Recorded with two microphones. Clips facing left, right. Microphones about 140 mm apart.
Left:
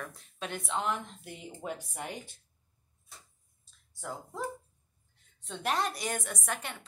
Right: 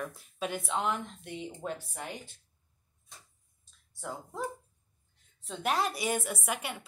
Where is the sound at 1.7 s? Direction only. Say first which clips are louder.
Right 1 dB; 15° left (ahead or behind).